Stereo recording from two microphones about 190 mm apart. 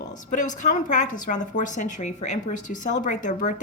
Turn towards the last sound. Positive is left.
turn(degrees=40)  # may be behind; listen again after turning